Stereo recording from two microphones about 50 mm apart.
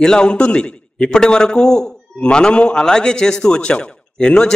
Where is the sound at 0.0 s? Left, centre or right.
Centre.